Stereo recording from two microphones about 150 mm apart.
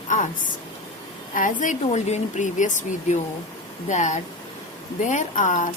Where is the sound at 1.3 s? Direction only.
60° left (ahead or behind).